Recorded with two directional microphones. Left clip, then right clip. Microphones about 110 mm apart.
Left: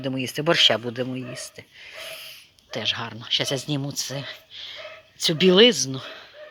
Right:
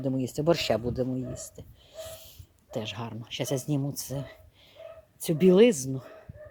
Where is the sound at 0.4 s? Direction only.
50° right (ahead or behind).